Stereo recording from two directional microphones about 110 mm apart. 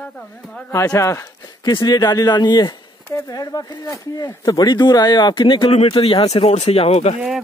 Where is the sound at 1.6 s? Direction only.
45° left (ahead or behind); by 7.2 s 75° left (ahead or behind).